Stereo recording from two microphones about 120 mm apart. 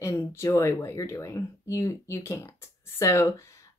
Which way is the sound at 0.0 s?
25° left (ahead or behind).